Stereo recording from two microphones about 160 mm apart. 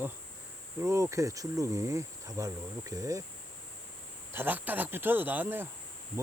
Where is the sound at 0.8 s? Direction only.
15° right (ahead or behind).